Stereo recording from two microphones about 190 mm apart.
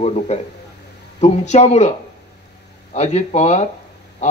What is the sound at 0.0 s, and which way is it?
A man's voice, 35° left (ahead or behind).